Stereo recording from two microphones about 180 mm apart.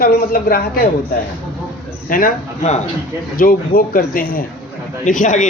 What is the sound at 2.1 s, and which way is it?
Speech, 45° left (ahead or behind).